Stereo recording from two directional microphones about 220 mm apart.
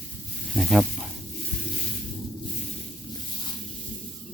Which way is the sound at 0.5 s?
Centre (ahead or behind).